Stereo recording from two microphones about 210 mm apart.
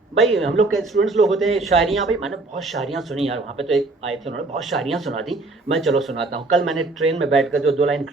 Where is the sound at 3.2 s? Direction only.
30° right (ahead or behind).